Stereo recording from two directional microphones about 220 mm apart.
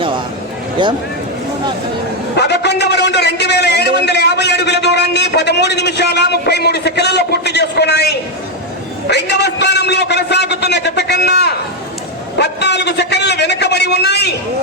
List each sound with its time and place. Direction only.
0.8 s speech: 20° right (ahead or behind)
2.3 s a sound: 50° left (ahead or behind)
9.0 s a man's voice: 50° left (ahead or behind)